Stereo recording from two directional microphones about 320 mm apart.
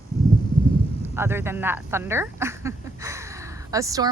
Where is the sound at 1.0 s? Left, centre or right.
Centre.